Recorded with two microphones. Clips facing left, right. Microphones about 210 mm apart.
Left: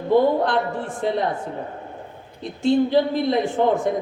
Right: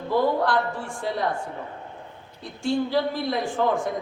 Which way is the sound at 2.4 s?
20° left (ahead or behind).